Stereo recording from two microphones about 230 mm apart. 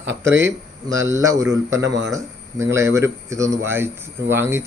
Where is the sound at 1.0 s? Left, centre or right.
Centre.